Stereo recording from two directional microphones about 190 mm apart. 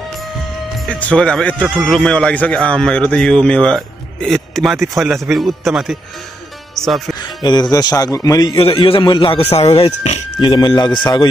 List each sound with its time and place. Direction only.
0.7 s a man's voice: 5° left (ahead or behind)
6.7 s music: centre (ahead or behind)
7.2 s music: 20° left (ahead or behind)
7.7 s a man's voice: 20° left (ahead or behind)